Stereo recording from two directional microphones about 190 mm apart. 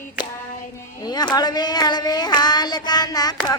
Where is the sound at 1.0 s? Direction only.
20° left (ahead or behind).